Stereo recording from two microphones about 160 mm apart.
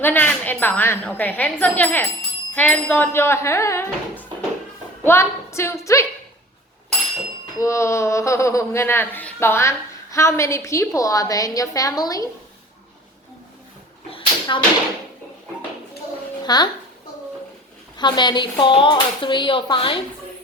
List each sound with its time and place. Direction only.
0.0 s speech: 10° left (ahead or behind)
7.6 s speech: 20° left (ahead or behind)
14.1 s a sound: 30° left (ahead or behind)
16.4 s a child's voice: 25° left (ahead or behind)
17.9 s speech: 25° left (ahead or behind)